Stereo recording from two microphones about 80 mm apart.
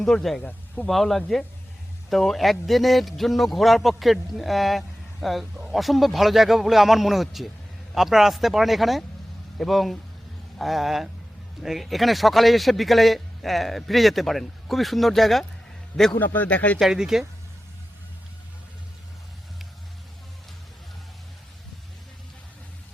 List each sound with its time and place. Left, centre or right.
0.0 s speech: centre
16.1 s a man's voice: left
16.8 s speech: centre